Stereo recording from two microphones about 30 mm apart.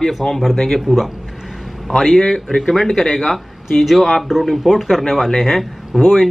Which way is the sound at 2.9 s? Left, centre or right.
Centre.